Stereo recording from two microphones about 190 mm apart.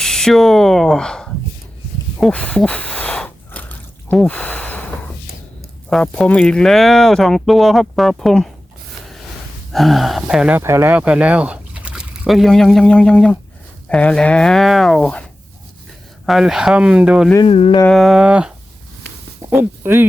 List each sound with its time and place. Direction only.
0.0 s speech: 5° left (ahead or behind)
2.1 s a sound: 5° left (ahead or behind)
5.9 s speech: 5° left (ahead or behind)
9.7 s speech: centre (ahead or behind)
17.4 s a sound: 30° left (ahead or behind)
17.8 s speech: centre (ahead or behind)